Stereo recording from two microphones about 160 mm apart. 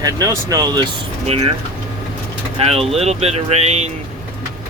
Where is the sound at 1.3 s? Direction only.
40° right (ahead or behind).